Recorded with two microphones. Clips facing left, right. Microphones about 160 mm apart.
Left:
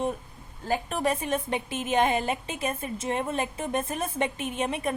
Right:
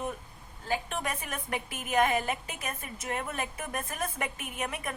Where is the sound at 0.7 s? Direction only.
35° left (ahead or behind).